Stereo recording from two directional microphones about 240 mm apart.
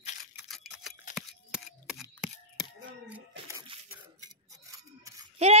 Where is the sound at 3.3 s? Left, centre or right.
Right.